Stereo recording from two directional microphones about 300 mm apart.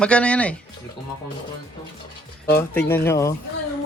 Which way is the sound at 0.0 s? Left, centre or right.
Centre.